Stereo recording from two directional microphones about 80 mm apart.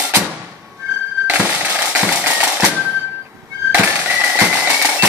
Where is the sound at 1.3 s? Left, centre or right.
Right.